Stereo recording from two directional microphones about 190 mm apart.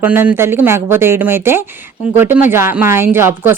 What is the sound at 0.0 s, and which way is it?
A man's voice, 10° right (ahead or behind).